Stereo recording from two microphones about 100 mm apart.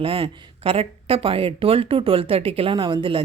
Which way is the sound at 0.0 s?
65° right (ahead or behind).